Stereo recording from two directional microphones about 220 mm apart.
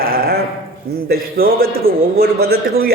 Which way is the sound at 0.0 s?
45° right (ahead or behind).